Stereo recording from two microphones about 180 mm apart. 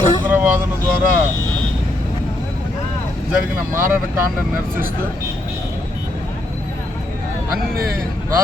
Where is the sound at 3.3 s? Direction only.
10° right (ahead or behind).